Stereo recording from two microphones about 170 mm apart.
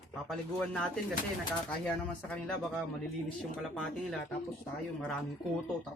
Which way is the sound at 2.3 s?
5° left (ahead or behind).